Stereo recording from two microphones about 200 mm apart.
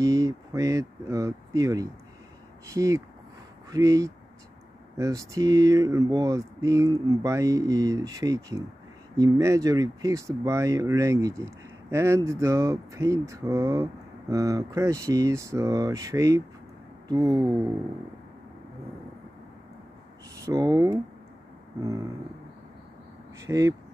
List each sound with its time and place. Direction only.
0.0 s speech: 15° right (ahead or behind)
20.4 s speech: 20° right (ahead or behind)
23.4 s speech: 15° right (ahead or behind)